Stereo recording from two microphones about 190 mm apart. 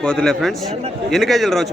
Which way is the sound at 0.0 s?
5° left (ahead or behind).